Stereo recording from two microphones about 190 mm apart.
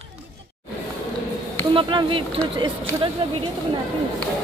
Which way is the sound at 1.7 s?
25° right (ahead or behind).